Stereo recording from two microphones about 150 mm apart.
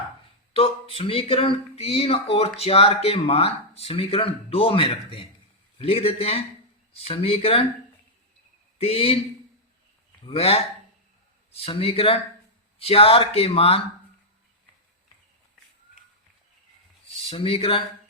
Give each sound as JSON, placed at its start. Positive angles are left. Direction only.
{"t": 0.5, "sound": "speech", "side_deg": 40}
{"t": 8.8, "sound": "speech", "side_deg": 40}
{"t": 10.2, "sound": "speech", "side_deg": 40}
{"t": 17.2, "sound": "speech", "side_deg": 40}